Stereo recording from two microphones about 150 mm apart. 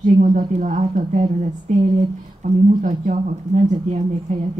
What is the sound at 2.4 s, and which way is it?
Speech, 60° right (ahead or behind).